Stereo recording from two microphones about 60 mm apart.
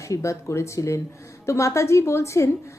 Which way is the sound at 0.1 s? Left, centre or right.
Left.